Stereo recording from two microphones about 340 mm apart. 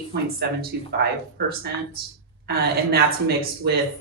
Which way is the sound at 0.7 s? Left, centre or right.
Right.